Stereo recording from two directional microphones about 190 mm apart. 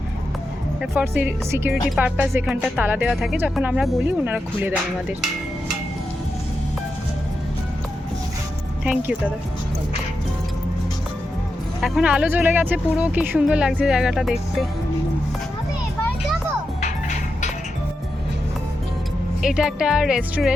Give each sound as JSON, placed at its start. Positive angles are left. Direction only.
{"t": 0.8, "sound": "speech", "side_deg": -10}
{"t": 8.8, "sound": "speech", "side_deg": -5}
{"t": 11.8, "sound": "speech", "side_deg": -5}
{"t": 16.8, "sound": "music", "side_deg": 40}
{"t": 19.4, "sound": "speech", "side_deg": -5}